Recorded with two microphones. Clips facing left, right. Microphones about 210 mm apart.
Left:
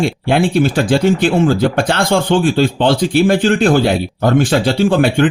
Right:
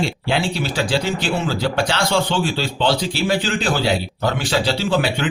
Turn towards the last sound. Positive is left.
turn(degrees=50)  # may be behind; listen again after turning